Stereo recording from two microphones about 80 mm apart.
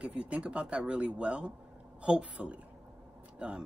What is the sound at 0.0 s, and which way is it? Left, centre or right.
Speech, centre.